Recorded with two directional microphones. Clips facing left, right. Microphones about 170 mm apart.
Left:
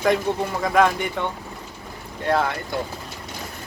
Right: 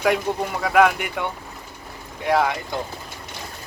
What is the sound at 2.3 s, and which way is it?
Speech, 15° right (ahead or behind).